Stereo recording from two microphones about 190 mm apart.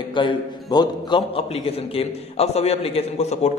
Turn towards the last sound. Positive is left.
turn(degrees=35)  # may be behind; listen again after turning